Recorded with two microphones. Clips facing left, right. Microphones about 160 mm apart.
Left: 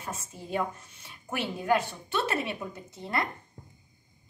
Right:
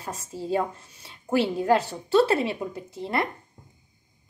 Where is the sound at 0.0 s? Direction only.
35° right (ahead or behind).